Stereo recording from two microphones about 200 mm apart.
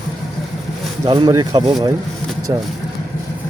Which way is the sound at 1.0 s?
20° right (ahead or behind).